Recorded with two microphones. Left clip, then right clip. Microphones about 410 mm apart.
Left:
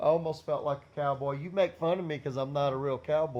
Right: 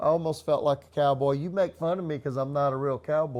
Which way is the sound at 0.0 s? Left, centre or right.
Right.